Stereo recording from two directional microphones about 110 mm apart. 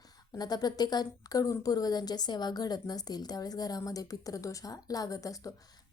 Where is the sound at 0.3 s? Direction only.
35° left (ahead or behind).